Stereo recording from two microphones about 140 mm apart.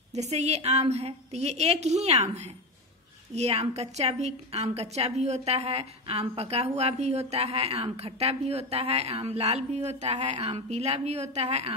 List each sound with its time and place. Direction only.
0.1 s a woman's voice: 55° right (ahead or behind)